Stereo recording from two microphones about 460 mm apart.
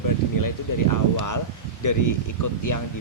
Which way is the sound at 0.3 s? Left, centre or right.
Left.